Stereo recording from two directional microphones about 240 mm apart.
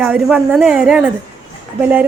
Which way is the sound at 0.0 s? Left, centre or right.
Centre.